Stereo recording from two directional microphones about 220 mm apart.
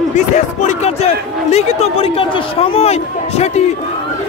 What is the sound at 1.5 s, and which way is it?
Speech, 25° left (ahead or behind).